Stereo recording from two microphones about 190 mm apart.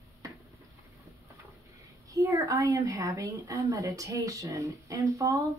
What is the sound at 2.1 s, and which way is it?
A woman's voice, 15° right (ahead or behind).